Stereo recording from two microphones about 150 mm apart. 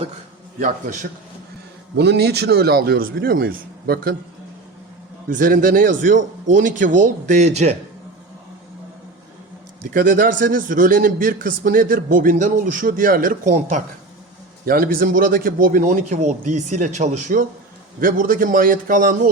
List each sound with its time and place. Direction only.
0.6 s a man's voice: 55° right (ahead or behind)
2.0 s a man's voice: 90° right
5.3 s a man's voice: 65° right (ahead or behind); by 7.8 s 50° right (ahead or behind)
9.9 s a man's voice: 65° right (ahead or behind)
14.6 s a man's voice: 75° right (ahead or behind); by 17.4 s 55° right (ahead or behind)
18.0 s a man's voice: 65° right (ahead or behind)